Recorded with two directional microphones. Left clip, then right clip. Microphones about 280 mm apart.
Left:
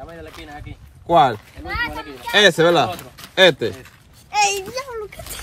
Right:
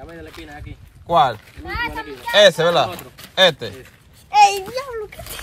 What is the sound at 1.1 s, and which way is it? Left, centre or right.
Speech, centre.